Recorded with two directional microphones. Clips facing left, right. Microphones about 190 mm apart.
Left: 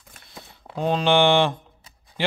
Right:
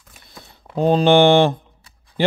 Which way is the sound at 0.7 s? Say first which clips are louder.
Right 6 dB; 40° right (ahead or behind).